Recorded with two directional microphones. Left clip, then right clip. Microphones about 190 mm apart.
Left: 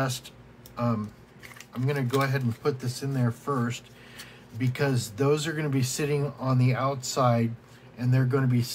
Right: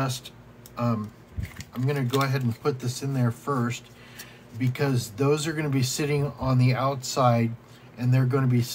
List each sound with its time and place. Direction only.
0.7 s speech: 5° right (ahead or behind)